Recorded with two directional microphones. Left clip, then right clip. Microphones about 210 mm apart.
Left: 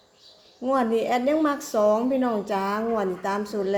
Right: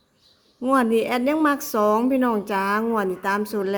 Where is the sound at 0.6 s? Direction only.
30° right (ahead or behind).